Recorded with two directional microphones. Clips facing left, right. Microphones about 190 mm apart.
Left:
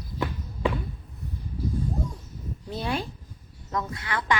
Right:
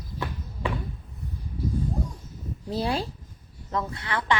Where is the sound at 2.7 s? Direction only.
30° right (ahead or behind).